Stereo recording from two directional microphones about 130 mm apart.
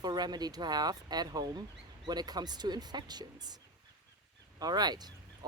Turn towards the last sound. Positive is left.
turn(degrees=-30)  # may be behind; listen again after turning